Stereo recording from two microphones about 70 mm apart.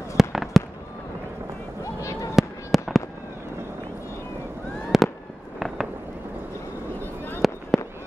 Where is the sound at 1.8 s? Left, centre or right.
Left.